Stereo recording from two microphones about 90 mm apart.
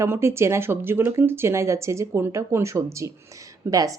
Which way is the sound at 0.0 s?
30° right (ahead or behind).